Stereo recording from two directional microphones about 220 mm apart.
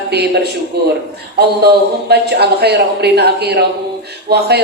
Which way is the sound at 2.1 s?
50° right (ahead or behind).